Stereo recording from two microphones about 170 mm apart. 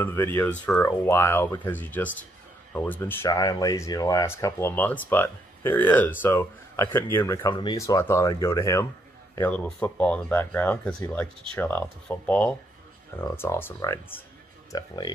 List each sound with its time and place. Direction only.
0.0 s speech: 15° left (ahead or behind)
14.7 s speech: 25° left (ahead or behind)